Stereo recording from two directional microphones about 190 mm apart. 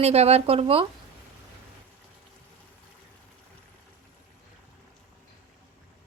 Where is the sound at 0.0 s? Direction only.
35° right (ahead or behind).